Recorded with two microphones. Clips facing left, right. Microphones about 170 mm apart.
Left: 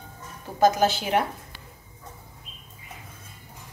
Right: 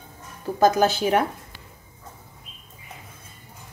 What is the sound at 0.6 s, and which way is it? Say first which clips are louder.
Speech: right 2 dB; 45° right (ahead or behind).